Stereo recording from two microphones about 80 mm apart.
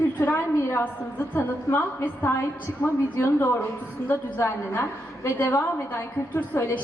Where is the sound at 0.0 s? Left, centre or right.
Left.